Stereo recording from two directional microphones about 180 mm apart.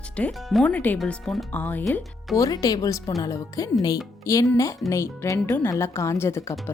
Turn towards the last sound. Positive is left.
turn(degrees=15)  # may be behind; listen again after turning